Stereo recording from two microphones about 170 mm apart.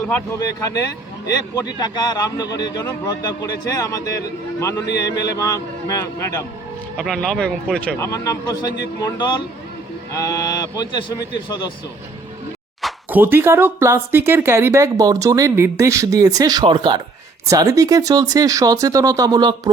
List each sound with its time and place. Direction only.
0.4 s speech: 20° left (ahead or behind)
5.2 s a man's voice: 20° left (ahead or behind)
6.9 s speech: centre (ahead or behind)
7.9 s speech: 20° left (ahead or behind)
13.1 s speech: 10° right (ahead or behind)